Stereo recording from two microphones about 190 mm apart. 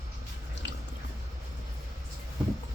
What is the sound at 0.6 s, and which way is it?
Drip, 70° left (ahead or behind).